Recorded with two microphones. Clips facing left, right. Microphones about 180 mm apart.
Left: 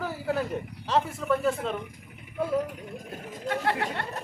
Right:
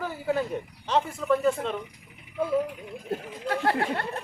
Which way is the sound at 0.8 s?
Centre (ahead or behind).